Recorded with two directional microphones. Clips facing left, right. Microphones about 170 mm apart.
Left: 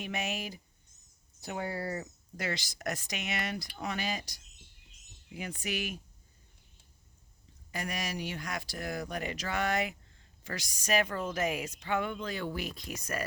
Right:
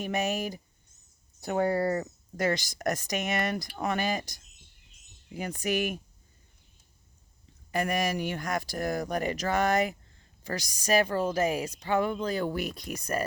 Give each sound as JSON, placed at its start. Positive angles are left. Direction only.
{"t": 0.0, "sound": "speech", "side_deg": -45}
{"t": 7.7, "sound": "a woman's voice", "side_deg": -55}